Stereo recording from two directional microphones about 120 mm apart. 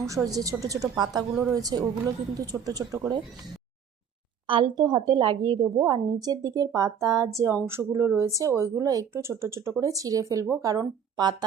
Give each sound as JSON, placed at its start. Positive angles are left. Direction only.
{"t": 0.0, "sound": "a woman's voice", "side_deg": -30}
{"t": 4.4, "sound": "a woman's voice", "side_deg": -45}